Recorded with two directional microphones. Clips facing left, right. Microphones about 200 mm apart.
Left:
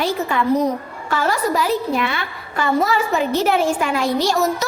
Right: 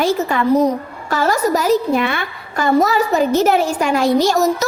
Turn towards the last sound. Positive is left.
turn(degrees=-45)  # may be behind; listen again after turning